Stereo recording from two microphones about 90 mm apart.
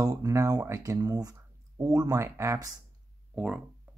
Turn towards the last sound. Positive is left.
turn(degrees=-10)  # may be behind; listen again after turning